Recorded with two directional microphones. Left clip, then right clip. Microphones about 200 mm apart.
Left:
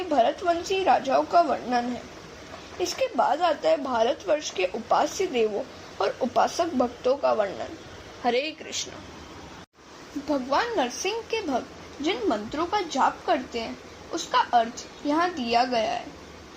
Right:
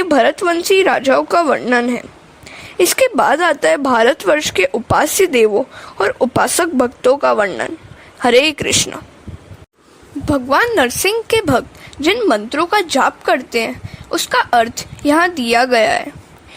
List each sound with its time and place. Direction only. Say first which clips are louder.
0.1 s speech: right 8 dB; 50° right (ahead or behind)
10.2 s speech: right 11 dB; 50° right (ahead or behind)